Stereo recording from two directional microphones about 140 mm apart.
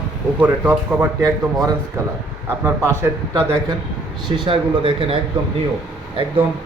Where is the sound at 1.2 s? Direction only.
25° right (ahead or behind).